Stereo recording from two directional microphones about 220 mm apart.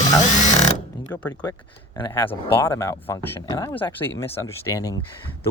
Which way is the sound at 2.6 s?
10° left (ahead or behind).